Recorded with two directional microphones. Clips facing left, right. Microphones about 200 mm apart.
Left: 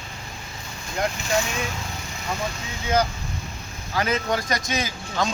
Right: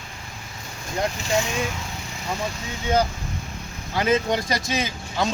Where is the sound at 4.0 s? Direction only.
25° right (ahead or behind).